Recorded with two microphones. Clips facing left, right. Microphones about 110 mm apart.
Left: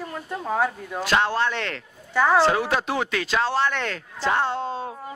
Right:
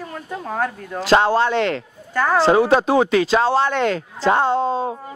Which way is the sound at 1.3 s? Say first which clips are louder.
Right 7 dB; 30° right (ahead or behind).